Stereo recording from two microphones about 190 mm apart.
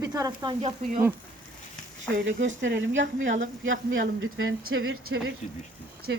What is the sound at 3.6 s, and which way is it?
A man's voice, 90° right.